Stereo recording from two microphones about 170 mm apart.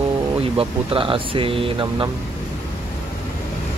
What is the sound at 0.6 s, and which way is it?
Speech, 30° right (ahead or behind).